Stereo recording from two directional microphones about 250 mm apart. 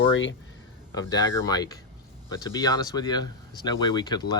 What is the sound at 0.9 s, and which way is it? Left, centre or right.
Speech, centre.